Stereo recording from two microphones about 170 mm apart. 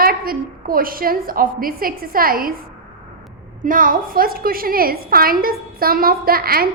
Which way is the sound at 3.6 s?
55° right (ahead or behind).